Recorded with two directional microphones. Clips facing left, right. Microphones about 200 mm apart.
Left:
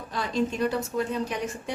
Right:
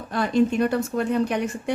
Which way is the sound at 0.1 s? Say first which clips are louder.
Right 7 dB; 55° right (ahead or behind).